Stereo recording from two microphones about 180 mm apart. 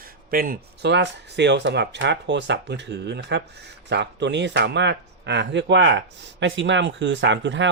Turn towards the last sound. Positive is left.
turn(degrees=-90)